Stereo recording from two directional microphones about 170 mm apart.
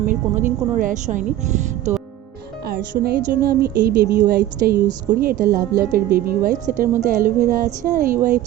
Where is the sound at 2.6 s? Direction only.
65° right (ahead or behind).